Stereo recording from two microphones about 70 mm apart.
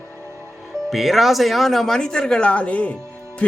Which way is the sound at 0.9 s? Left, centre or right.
Centre.